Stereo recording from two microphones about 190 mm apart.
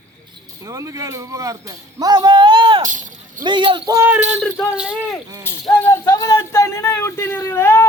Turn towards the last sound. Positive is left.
turn(degrees=10)  # may be behind; listen again after turning